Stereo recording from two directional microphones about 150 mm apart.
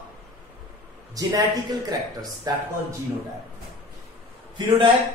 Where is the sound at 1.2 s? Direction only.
25° right (ahead or behind).